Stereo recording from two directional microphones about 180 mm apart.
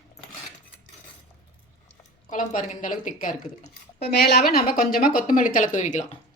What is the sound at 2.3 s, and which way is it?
A woman's voice, 45° left (ahead or behind).